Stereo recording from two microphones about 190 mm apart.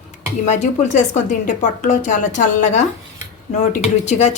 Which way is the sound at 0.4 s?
40° left (ahead or behind).